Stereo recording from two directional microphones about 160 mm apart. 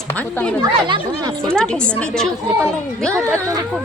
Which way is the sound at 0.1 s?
10° left (ahead or behind).